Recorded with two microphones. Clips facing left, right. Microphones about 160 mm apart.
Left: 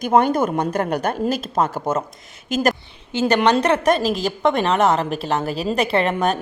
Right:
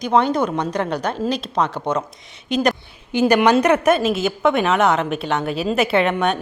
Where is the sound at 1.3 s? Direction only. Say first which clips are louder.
Even; 45° left (ahead or behind).